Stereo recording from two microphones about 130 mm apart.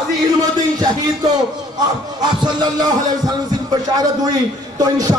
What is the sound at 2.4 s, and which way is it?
A man's voice, 35° right (ahead or behind).